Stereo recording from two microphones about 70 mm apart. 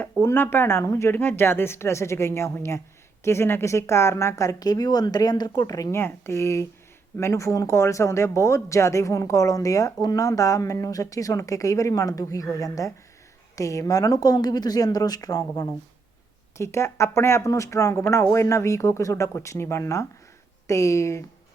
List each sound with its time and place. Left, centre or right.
0.3 s speech: left
1.1 s speech: left
5.9 s speech: left
16.6 s speech: left